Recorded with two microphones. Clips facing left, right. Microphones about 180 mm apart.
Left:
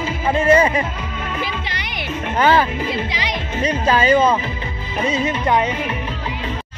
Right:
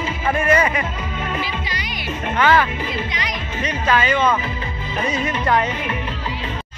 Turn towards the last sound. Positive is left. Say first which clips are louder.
# left 2 dB
turn(degrees=20)  # may be behind; listen again after turning